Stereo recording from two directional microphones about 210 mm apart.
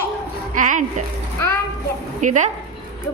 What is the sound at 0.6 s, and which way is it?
Speech, 40° right (ahead or behind).